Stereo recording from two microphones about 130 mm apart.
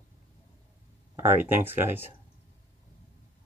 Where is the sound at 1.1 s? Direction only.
15° right (ahead or behind).